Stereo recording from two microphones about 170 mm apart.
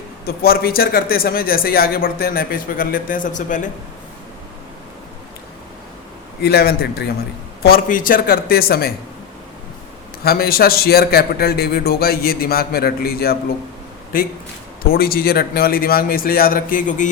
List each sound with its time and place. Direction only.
0.3 s speech: 65° left (ahead or behind)
6.4 s a man's voice: 70° left (ahead or behind)
7.6 s speech: 55° left (ahead or behind)
10.2 s speech: 65° left (ahead or behind)